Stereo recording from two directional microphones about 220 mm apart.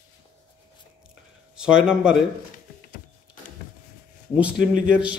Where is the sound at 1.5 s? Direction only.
5° right (ahead or behind).